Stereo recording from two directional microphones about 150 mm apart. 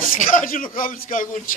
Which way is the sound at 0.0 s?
60° left (ahead or behind).